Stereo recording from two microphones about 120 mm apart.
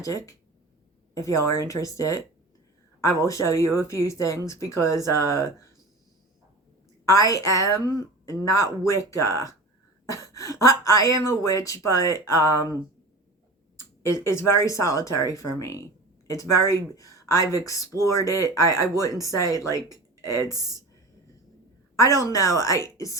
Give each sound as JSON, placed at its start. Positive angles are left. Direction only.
{"t": 0.0, "sound": "speech", "side_deg": 30}
{"t": 7.0, "sound": "speech", "side_deg": 25}
{"t": 10.6, "sound": "speech", "side_deg": 25}
{"t": 13.7, "sound": "speech", "side_deg": 20}
{"t": 20.5, "sound": "speech", "side_deg": -30}
{"t": 21.9, "sound": "speech", "side_deg": 25}